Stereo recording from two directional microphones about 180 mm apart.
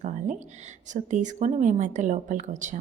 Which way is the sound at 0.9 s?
45° right (ahead or behind).